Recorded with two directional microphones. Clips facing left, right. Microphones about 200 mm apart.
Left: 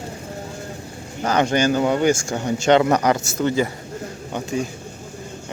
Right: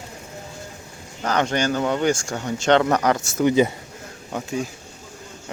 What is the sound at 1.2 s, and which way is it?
Speech, 10° left (ahead or behind).